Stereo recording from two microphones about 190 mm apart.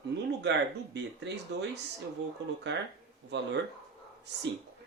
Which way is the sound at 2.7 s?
65° right (ahead or behind).